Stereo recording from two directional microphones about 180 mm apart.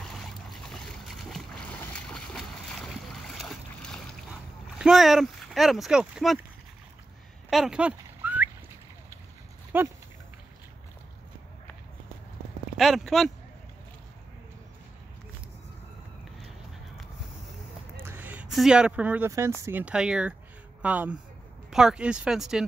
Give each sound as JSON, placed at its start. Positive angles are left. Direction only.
{"t": 0.0, "sound": "boat", "side_deg": 0}
{"t": 2.1, "sound": "splash", "side_deg": 0}
{"t": 4.7, "sound": "speech", "side_deg": -5}
{"t": 7.4, "sound": "a sound", "side_deg": 0}
{"t": 9.7, "sound": "dog", "side_deg": -10}
{"t": 12.7, "sound": "speech", "side_deg": 0}
{"t": 17.9, "sound": "a sound", "side_deg": -10}
{"t": 19.6, "sound": "speech", "side_deg": -10}